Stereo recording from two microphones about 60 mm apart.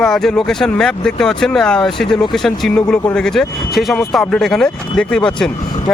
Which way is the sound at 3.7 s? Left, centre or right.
Centre.